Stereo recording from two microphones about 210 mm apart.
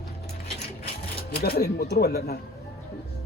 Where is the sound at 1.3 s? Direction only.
50° left (ahead or behind).